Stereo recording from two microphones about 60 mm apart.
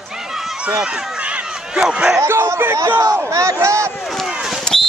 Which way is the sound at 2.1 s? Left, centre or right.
Right.